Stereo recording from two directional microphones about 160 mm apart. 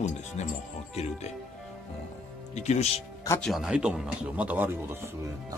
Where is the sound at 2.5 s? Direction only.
45° left (ahead or behind).